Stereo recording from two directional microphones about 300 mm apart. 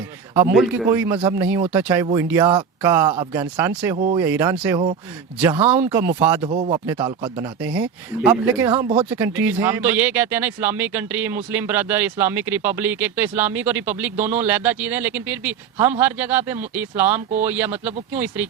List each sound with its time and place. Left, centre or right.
0.3 s speech: centre
3.9 s speech: right
4.2 s speech: centre
6.4 s speech: centre
9.0 s speech: centre